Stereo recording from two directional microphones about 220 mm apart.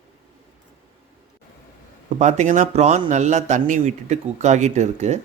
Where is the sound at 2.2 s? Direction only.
35° right (ahead or behind).